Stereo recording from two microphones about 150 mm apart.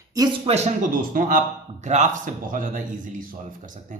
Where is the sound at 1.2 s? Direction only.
70° right (ahead or behind).